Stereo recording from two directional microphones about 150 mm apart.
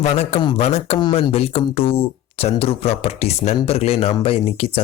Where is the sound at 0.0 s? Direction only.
45° left (ahead or behind).